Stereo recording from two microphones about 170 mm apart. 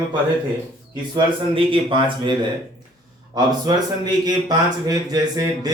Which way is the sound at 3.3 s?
25° right (ahead or behind).